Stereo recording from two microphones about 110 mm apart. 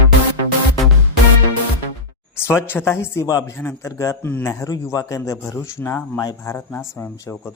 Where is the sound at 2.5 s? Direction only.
20° left (ahead or behind).